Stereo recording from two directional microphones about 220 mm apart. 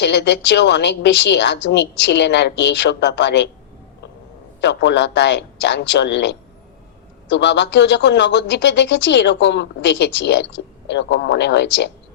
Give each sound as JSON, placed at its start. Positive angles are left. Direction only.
{"t": 0.0, "sound": "speech", "side_deg": 50}
{"t": 4.6, "sound": "speech", "side_deg": 50}